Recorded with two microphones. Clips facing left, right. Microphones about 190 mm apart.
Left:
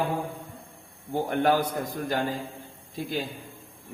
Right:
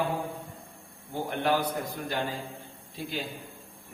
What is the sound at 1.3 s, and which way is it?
Speech, 45° left (ahead or behind).